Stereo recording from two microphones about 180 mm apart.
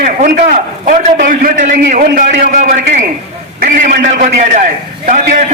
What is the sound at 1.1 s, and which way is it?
A man's voice, 45° right (ahead or behind).